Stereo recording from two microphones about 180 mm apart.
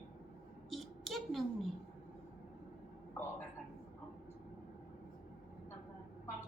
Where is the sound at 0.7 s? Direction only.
Centre (ahead or behind).